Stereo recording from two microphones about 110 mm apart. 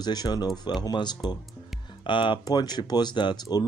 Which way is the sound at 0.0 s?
40° left (ahead or behind).